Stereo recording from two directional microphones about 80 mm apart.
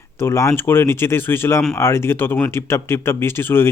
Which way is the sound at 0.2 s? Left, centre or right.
Left.